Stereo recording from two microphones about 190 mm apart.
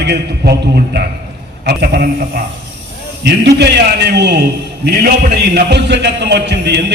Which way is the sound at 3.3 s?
60° right (ahead or behind).